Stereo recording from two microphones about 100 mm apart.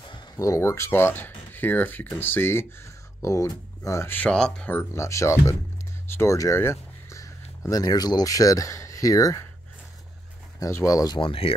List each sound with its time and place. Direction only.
0.4 s speech: 30° left (ahead or behind)
4.2 s speech: 10° left (ahead or behind)
4.7 s speech: 30° left (ahead or behind)
10.6 s speech: 30° left (ahead or behind)
11.1 s speech: 65° left (ahead or behind)